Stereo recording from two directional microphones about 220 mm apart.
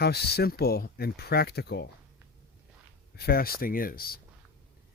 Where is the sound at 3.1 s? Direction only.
45° left (ahead or behind).